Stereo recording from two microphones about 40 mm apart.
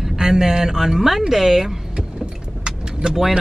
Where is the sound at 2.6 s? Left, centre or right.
Centre.